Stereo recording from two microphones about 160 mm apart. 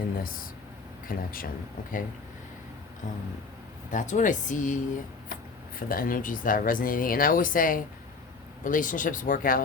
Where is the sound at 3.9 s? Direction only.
50° left (ahead or behind).